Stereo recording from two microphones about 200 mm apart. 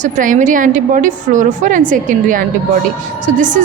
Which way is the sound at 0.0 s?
40° right (ahead or behind).